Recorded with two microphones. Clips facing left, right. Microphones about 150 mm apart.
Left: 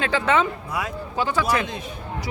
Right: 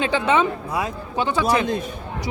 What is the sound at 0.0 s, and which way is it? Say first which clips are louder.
Speech: right 2 dB; 20° right (ahead or behind).